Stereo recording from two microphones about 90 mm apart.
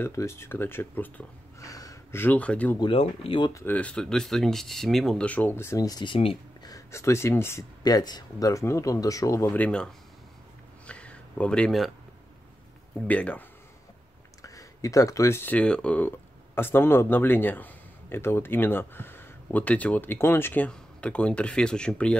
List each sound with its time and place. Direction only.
0.0 s speech: 30° left (ahead or behind)
1.6 s a sound: 40° left (ahead or behind)
2.1 s speech: 20° left (ahead or behind)
2.8 s speech: 75° left (ahead or behind)
3.6 s speech: 15° left (ahead or behind)
5.8 s speech: 45° left (ahead or behind)
6.0 s speech: 85° left
6.9 s speech: 30° left (ahead or behind)
7.8 s speech: 50° left (ahead or behind)
9.5 s speech: 15° left (ahead or behind)
10.9 s a sound: 15° left (ahead or behind)
13.0 s speech: 15° left (ahead or behind)
14.4 s a sound: 40° left (ahead or behind)
15.4 s speech: 15° left (ahead or behind)